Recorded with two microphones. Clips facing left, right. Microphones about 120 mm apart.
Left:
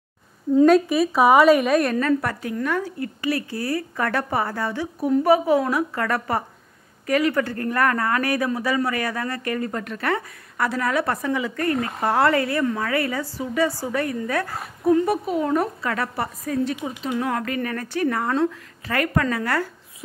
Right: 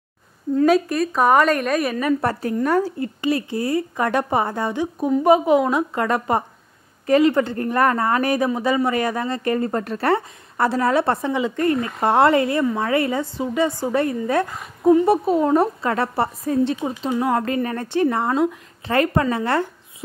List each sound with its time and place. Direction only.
0.7 s a woman's voice: centre (ahead or behind)
2.6 s speech: 40° right (ahead or behind)
3.0 s a woman's voice: 25° right (ahead or behind)
15.2 s a woman's voice: 30° right (ahead or behind)